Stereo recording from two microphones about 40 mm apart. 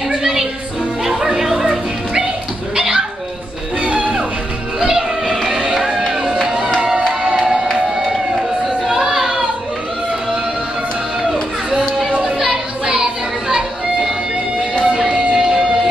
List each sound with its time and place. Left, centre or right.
0.1 s music: centre
1.5 s music: centre
2.7 s a sound: right
3.9 s music: right
4.7 s music: centre
6.8 s crowd: right
7.3 s music: centre
8.8 s a sound: centre
12.3 s music: centre
15.0 s music: centre